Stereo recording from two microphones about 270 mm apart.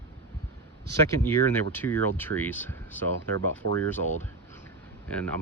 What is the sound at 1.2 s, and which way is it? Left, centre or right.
Speech, centre.